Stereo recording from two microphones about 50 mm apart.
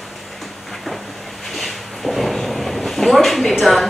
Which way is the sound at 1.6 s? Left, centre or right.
Centre.